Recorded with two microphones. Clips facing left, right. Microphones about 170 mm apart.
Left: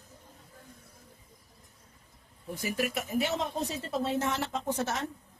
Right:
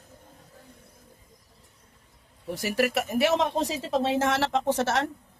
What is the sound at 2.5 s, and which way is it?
Speech, 75° right (ahead or behind).